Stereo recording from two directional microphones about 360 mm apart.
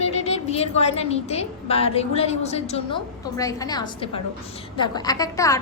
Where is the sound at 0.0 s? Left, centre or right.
Centre.